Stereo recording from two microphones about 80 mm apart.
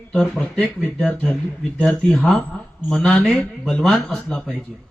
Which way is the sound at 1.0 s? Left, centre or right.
Centre.